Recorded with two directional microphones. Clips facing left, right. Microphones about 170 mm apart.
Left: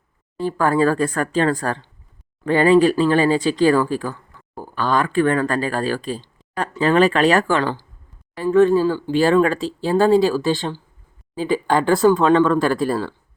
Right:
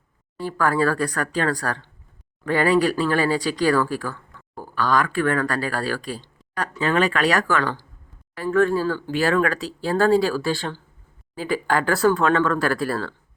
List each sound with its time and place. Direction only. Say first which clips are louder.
0.3 s speech: left 4 dB; 25° left (ahead or behind)
6.7 s speech: left 6 dB; 35° left (ahead or behind); by 13.1 s 20° left (ahead or behind)